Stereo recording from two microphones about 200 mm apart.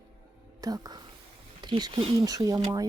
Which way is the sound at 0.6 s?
20° right (ahead or behind).